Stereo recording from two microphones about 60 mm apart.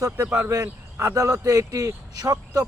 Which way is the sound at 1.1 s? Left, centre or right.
Right.